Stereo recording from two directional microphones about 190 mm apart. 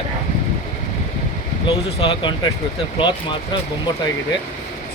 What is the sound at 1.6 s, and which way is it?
Speech, 25° left (ahead or behind).